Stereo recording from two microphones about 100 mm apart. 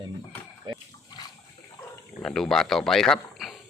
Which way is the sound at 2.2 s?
5° left (ahead or behind).